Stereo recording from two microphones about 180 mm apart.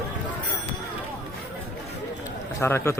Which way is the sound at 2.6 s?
15° left (ahead or behind).